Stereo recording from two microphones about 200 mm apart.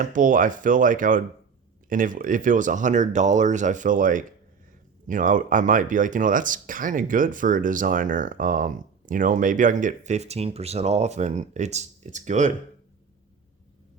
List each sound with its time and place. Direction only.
0.0 s speech: 40° right (ahead or behind)